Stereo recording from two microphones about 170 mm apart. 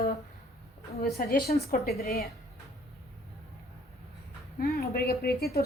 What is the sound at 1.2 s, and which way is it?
A woman's voice, 55° left (ahead or behind).